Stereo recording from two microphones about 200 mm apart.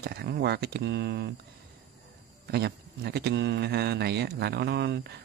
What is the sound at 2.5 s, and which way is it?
Speech, 55° right (ahead or behind).